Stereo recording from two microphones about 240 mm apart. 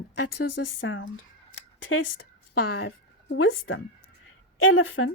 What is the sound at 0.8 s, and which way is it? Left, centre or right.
Speech, left.